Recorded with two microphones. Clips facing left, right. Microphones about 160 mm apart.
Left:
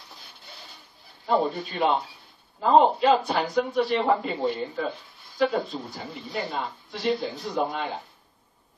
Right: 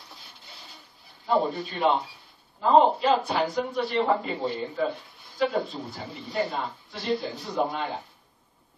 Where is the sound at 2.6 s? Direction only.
Centre (ahead or behind).